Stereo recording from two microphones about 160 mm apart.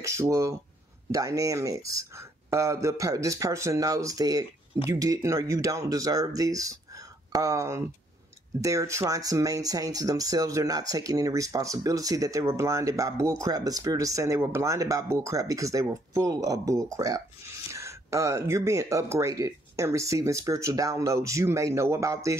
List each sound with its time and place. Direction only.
0.0 s speech: 20° right (ahead or behind)